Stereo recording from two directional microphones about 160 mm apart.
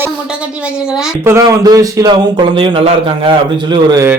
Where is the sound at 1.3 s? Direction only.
20° right (ahead or behind).